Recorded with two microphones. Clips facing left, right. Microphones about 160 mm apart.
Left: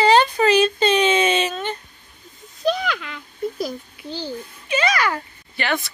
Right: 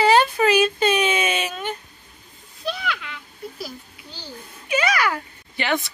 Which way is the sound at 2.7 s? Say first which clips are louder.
Left 3 dB; 40° left (ahead or behind).